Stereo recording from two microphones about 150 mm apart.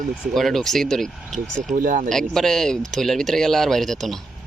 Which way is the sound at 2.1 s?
5° left (ahead or behind).